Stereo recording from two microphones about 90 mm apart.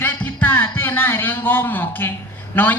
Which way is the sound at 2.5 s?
20° left (ahead or behind).